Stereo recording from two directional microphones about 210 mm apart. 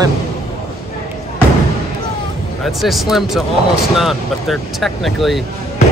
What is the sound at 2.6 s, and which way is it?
Speech, centre (ahead or behind).